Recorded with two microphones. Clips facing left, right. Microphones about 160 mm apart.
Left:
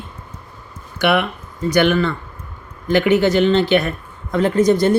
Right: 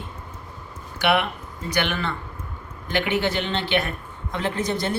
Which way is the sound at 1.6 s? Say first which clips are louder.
Left 10 dB; 45° left (ahead or behind).